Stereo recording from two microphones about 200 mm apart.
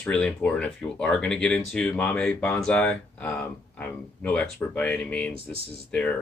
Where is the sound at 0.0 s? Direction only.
5° left (ahead or behind).